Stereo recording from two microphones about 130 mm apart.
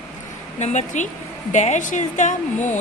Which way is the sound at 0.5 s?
60° left (ahead or behind).